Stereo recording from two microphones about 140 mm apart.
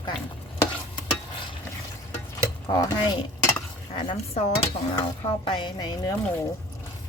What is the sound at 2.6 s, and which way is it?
Speech, 25° left (ahead or behind).